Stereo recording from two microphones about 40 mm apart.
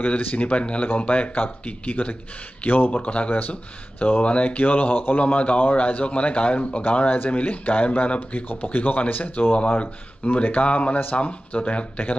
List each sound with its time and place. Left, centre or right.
0.0 s speech: left
4.2 s speech: left
5.2 s speech: left
8.2 s speech: left